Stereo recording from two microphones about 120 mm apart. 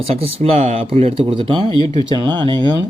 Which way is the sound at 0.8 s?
50° right (ahead or behind).